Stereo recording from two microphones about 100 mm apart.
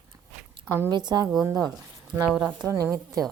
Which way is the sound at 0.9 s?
45° right (ahead or behind).